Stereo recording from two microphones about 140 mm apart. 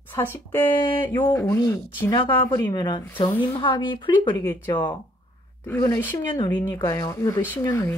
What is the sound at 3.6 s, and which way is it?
Speech, 35° left (ahead or behind).